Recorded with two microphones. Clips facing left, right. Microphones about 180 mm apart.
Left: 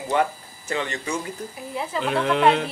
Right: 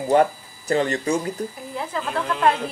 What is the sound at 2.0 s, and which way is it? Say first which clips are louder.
Speech: left 7 dB; 70° left (ahead or behind).